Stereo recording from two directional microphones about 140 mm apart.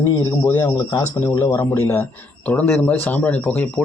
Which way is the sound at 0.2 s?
20° left (ahead or behind).